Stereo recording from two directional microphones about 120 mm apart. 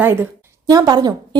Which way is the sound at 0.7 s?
30° right (ahead or behind).